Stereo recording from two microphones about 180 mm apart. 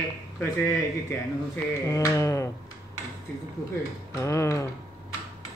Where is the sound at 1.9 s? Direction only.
15° left (ahead or behind).